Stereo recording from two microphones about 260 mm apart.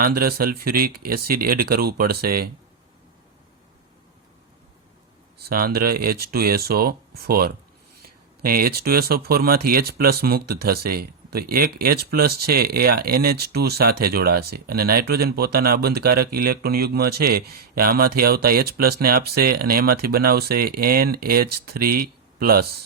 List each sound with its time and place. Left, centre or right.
0.0 s speech: right
5.4 s speech: right